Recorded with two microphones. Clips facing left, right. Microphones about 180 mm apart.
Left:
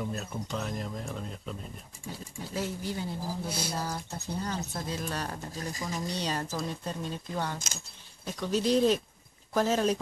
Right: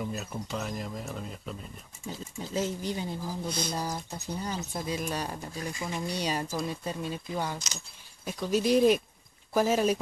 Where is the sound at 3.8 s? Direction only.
15° right (ahead or behind).